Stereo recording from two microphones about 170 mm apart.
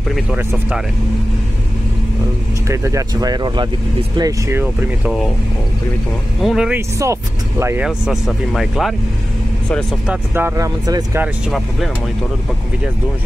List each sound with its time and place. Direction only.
0.4 s speech: 15° right (ahead or behind)
2.7 s speech: 20° right (ahead or behind)
4.2 s speech: 15° right (ahead or behind)
6.4 s speech: 5° right (ahead or behind)
7.0 s vehicle: 15° right (ahead or behind)
7.8 s speech: 5° right (ahead or behind)
10.0 s speech: 15° right (ahead or behind)